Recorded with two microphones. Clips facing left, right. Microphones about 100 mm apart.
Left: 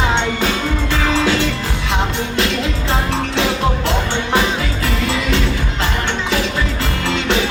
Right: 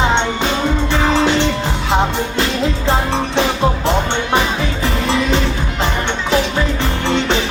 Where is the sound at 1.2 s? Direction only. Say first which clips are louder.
Right 2 dB; 25° right (ahead or behind).